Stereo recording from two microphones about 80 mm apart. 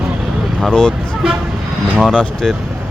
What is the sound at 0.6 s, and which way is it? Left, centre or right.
Speech, centre.